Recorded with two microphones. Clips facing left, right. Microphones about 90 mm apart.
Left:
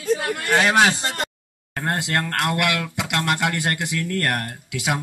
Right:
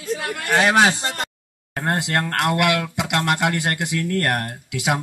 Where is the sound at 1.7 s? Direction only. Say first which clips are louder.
Right 2 dB; 20° right (ahead or behind).